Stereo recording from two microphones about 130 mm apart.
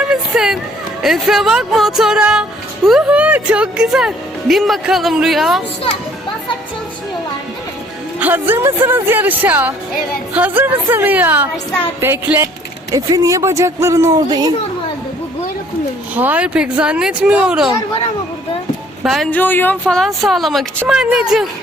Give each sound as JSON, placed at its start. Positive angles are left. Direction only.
{"t": 0.0, "sound": "a sound", "side_deg": -5}
{"t": 1.0, "sound": "speech", "side_deg": 0}
{"t": 8.2, "sound": "speech", "side_deg": -15}
{"t": 16.1, "sound": "speech", "side_deg": -10}
{"t": 19.0, "sound": "speech", "side_deg": 0}
{"t": 19.3, "sound": "speech", "side_deg": 15}